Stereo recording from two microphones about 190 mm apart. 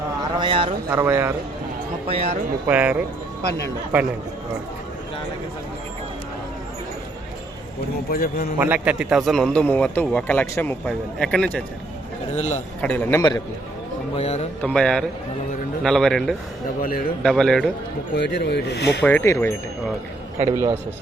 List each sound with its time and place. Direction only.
0.3 s a sound: 25° right (ahead or behind)
0.9 s speech: 15° right (ahead or behind)
2.0 s speech: 30° right (ahead or behind)
2.6 s speech: 10° right (ahead or behind)
8.1 s a man's voice: 50° left (ahead or behind)
8.5 s a man's voice: 10° right (ahead or behind)
12.3 s a man's voice: 40° left (ahead or behind)
12.8 s a man's voice: 10° left (ahead or behind)
14.2 s a man's voice: 35° left (ahead or behind)
14.6 s a man's voice: 5° left (ahead or behind)
18.1 s speech: 65° left (ahead or behind)
19.0 s a man's voice: 10° left (ahead or behind)
20.5 s a man's voice: 20° right (ahead or behind)